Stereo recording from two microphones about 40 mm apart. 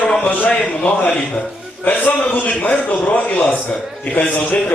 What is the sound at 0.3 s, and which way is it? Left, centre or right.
A man's voice, left.